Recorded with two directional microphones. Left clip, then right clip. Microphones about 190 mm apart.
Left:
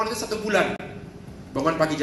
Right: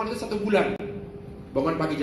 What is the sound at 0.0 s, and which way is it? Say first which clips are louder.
Speech: left 2 dB; 20° left (ahead or behind).